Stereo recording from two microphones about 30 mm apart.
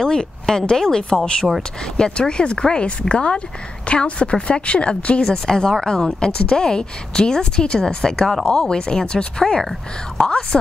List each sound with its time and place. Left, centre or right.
0.0 s a woman's voice: left
2.0 s a woman's voice: left
5.3 s a woman's voice: left
5.7 s a woman's voice: centre